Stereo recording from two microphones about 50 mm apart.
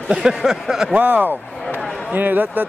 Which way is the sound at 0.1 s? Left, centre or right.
Centre.